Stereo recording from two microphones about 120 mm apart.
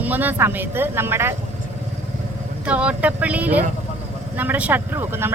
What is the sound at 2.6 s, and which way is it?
Speech, 10° right (ahead or behind).